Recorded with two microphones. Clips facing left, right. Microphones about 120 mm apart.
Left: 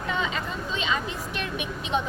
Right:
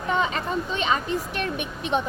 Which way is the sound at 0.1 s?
45° right (ahead or behind).